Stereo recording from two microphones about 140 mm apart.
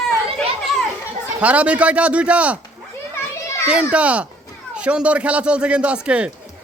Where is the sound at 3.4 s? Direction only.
20° left (ahead or behind).